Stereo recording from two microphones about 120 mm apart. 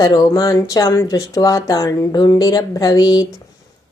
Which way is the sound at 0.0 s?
30° left (ahead or behind).